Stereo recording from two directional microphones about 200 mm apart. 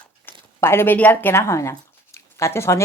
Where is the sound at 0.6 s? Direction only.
10° left (ahead or behind).